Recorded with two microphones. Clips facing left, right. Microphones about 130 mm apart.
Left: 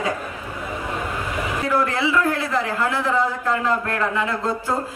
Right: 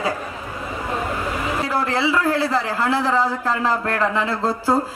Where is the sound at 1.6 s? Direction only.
30° right (ahead or behind).